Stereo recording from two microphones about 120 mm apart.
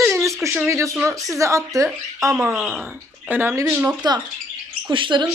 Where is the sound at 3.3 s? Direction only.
15° right (ahead or behind).